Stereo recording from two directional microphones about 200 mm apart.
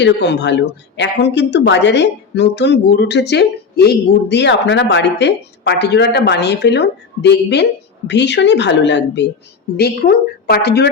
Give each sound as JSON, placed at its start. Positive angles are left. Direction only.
{"t": 0.0, "sound": "a woman's voice", "side_deg": 60}